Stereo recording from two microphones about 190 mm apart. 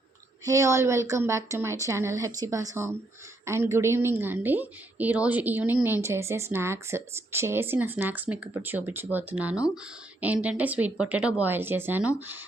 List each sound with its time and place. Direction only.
0.4 s a woman's voice: 15° right (ahead or behind)